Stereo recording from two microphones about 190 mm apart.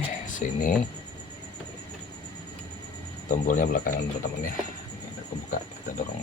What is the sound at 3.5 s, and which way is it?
Speech, 45° left (ahead or behind).